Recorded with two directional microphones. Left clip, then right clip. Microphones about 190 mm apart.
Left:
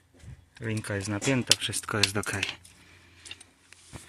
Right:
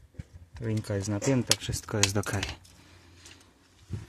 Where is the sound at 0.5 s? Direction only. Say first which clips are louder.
Even; 15° right (ahead or behind).